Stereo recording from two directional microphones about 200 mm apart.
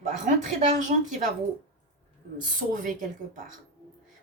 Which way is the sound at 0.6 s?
40° right (ahead or behind).